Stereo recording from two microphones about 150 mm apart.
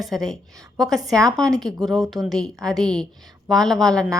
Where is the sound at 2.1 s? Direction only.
Centre (ahead or behind).